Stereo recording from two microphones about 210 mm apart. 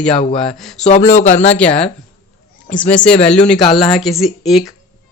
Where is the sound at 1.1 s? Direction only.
35° left (ahead or behind).